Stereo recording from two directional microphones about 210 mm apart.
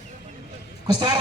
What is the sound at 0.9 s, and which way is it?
Speech, 20° right (ahead or behind).